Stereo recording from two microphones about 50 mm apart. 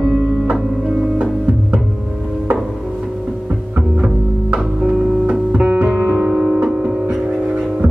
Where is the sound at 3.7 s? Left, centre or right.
Right.